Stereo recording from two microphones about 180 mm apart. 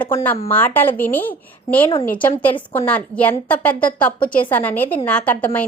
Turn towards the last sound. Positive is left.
turn(degrees=10)  # may be behind; listen again after turning